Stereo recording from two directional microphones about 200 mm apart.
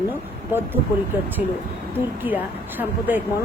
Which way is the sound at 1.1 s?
10° right (ahead or behind).